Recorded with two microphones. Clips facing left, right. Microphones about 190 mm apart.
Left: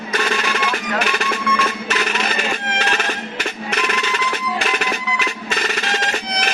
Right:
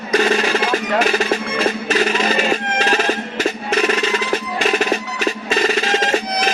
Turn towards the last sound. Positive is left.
turn(degrees=-35)  # may be behind; listen again after turning